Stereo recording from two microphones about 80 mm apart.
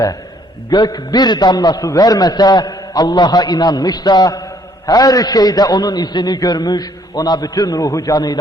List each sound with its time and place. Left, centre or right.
0.7 s a man's voice: left